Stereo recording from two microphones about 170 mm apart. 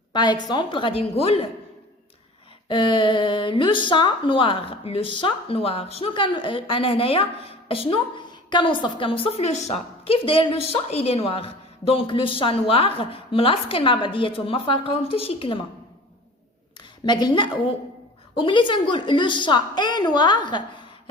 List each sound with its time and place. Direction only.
0.1 s a woman's voice: 25° left (ahead or behind)
2.6 s a woman's voice: 30° left (ahead or behind)
17.1 s a woman's voice: 25° left (ahead or behind)